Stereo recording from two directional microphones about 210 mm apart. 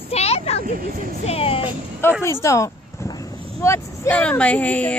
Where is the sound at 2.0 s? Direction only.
10° left (ahead or behind).